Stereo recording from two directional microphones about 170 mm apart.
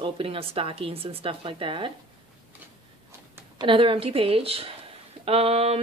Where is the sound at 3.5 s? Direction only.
30° right (ahead or behind).